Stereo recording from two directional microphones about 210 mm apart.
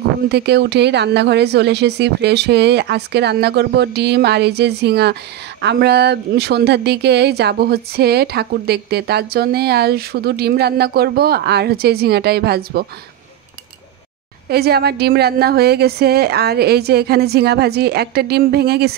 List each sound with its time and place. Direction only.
0.3 s speech: 55° right (ahead or behind)
14.5 s speech: 50° right (ahead or behind)